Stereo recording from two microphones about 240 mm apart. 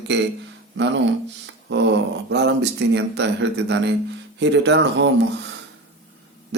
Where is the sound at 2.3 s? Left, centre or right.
Right.